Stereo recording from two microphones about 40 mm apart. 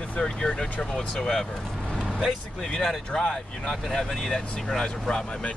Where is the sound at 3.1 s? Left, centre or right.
Centre.